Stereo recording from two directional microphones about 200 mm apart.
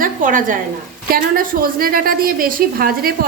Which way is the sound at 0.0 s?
40° right (ahead or behind).